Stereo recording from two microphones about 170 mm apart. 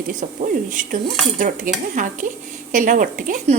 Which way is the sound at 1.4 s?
50° right (ahead or behind).